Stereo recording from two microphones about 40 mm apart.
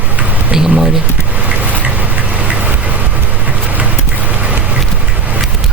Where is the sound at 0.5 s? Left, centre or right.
Centre.